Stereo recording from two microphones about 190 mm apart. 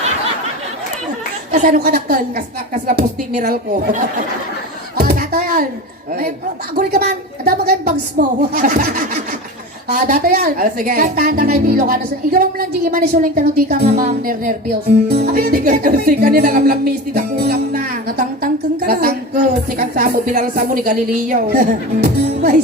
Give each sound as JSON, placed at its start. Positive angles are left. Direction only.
{"t": 1.5, "sound": "speech", "side_deg": -45}
{"t": 4.9, "sound": "a sound", "side_deg": -55}
{"t": 6.7, "sound": "speech", "side_deg": -55}